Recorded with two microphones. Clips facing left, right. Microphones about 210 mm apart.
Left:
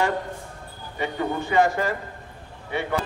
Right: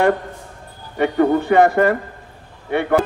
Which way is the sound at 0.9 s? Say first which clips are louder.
Right 11 dB; 60° right (ahead or behind).